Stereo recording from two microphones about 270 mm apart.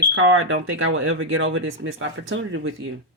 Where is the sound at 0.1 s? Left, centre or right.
Right.